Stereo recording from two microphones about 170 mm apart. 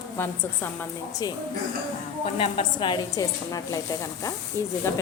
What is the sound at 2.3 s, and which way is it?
A woman's voice, 30° left (ahead or behind).